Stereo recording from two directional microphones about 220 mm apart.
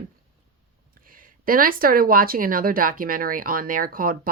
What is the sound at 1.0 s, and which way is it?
Speech, 40° right (ahead or behind).